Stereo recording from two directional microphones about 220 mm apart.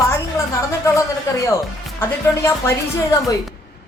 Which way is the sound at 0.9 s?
15° left (ahead or behind).